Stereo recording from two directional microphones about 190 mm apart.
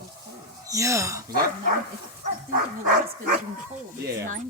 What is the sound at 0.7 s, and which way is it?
Speech, 15° right (ahead or behind).